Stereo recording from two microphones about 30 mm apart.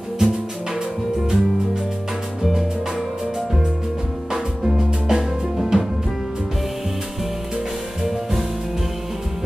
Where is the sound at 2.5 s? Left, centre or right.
Centre.